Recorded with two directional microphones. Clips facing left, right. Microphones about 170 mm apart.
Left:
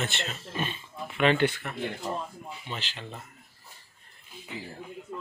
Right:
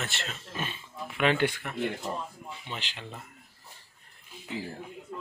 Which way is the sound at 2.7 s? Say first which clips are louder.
Left 1 dB; 15° right (ahead or behind).